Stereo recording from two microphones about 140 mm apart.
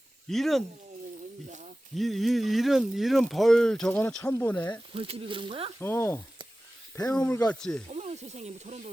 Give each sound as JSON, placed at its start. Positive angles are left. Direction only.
{"t": 0.3, "sound": "speech", "side_deg": 0}
{"t": 2.0, "sound": "speech", "side_deg": 0}
{"t": 4.9, "sound": "speech", "side_deg": -45}
{"t": 5.8, "sound": "speech", "side_deg": 15}
{"t": 7.9, "sound": "speech", "side_deg": -50}